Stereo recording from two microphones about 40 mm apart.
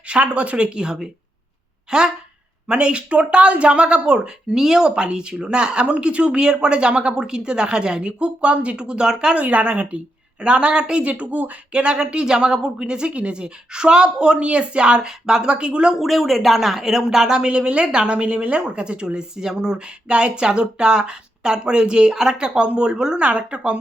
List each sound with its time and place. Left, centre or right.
0.1 s speech: right
2.6 s speech: right
4.5 s speech: centre
9.3 s speech: right
11.0 s speech: right
11.7 s speech: right
16.0 s speech: centre; by 23.8 s right